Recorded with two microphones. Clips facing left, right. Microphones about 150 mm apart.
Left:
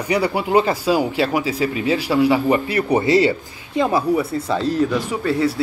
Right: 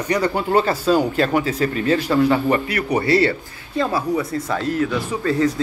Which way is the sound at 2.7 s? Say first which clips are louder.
Left 3 dB; 30° left (ahead or behind).